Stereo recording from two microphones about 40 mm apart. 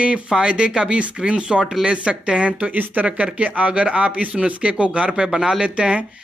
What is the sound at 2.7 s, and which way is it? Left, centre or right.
Speech, right.